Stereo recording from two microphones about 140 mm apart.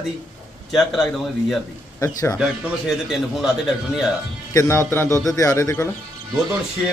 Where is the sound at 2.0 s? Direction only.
20° left (ahead or behind).